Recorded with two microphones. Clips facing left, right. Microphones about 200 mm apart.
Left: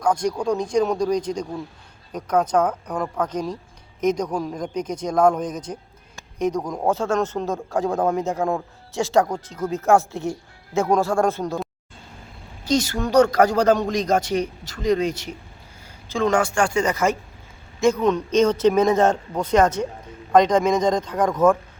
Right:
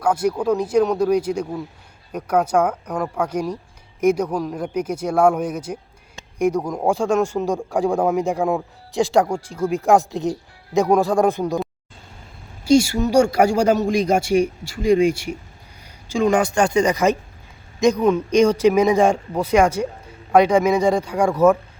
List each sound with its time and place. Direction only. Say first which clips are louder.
0.0 s speech: right 2 dB; 5° right (ahead or behind)
12.6 s speech: right 6 dB; 10° right (ahead or behind)